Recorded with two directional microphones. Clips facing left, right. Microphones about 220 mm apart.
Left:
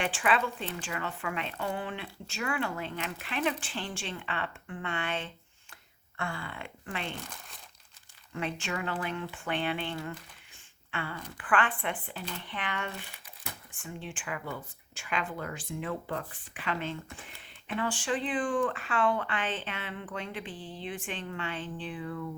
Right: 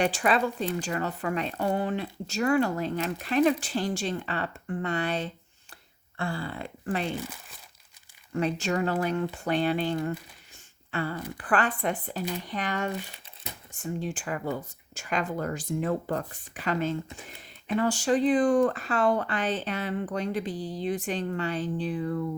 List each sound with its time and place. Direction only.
0.0 s speech: 40° right (ahead or behind)
7.2 s speech: 5° right (ahead or behind)
8.3 s speech: 40° right (ahead or behind)